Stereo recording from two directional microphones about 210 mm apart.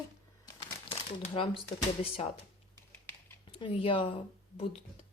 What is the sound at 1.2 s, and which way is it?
Speech, 25° left (ahead or behind).